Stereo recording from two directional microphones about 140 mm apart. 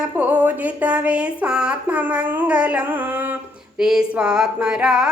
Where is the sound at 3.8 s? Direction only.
5° right (ahead or behind).